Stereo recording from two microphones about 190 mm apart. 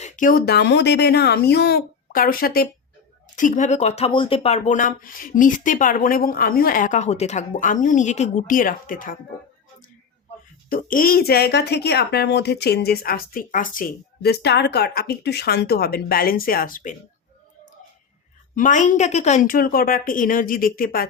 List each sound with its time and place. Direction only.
0.0 s a woman's voice: 45° left (ahead or behind)
10.7 s a woman's voice: 45° left (ahead or behind)
18.5 s speech: 45° left (ahead or behind)